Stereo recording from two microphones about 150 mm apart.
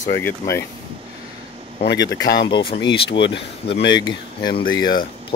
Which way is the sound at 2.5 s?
35° left (ahead or behind).